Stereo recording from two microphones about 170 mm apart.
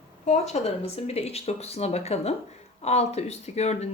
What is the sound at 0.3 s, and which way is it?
Speech, 40° left (ahead or behind).